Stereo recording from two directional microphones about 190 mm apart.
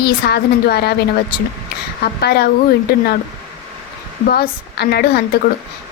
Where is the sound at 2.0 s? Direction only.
60° left (ahead or behind).